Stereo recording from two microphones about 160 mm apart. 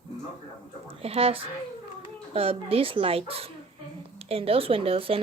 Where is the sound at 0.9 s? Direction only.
40° right (ahead or behind).